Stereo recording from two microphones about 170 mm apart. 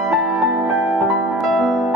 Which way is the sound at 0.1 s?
5° right (ahead or behind).